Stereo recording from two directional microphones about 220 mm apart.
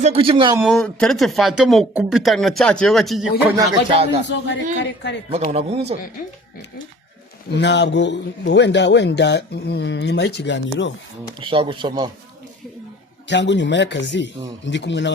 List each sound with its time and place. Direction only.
0.0 s speech: 25° right (ahead or behind)
0.6 s speech: centre (ahead or behind)
3.5 s speech: 25° right (ahead or behind)
4.2 s a man's voice: 55° left (ahead or behind)
5.3 s speech: 30° right (ahead or behind)
7.5 s a man's voice: 50° left (ahead or behind)
11.3 s speech: 25° right (ahead or behind)
13.2 s a man's voice: 55° left (ahead or behind)